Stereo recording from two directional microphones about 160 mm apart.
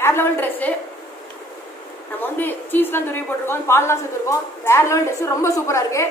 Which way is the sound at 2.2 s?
10° left (ahead or behind).